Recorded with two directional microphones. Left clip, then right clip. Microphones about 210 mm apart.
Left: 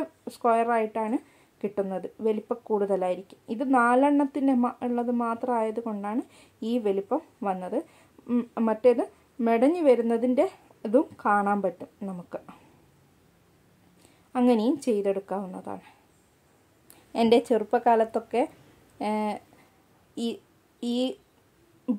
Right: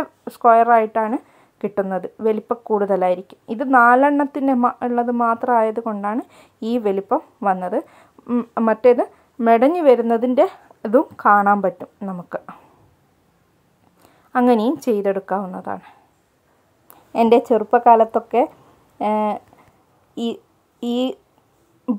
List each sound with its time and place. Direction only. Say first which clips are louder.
0.0 s a woman's voice: right 10 dB; 15° right (ahead or behind)
14.0 s a woman's voice: right 8 dB; 15° right (ahead or behind)
17.1 s a woman's voice: right 7 dB; 15° right (ahead or behind)
21.9 s a sound: right 6 dB; 15° right (ahead or behind)